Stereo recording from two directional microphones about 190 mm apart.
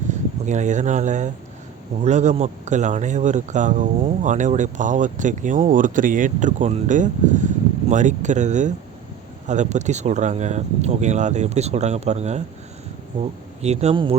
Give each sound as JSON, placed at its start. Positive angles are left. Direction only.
{"t": 0.1, "sound": "speech", "side_deg": -40}
{"t": 13.6, "sound": "speech", "side_deg": -35}